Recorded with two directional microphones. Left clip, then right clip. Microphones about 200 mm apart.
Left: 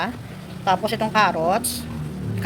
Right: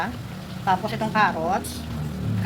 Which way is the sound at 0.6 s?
55° left (ahead or behind).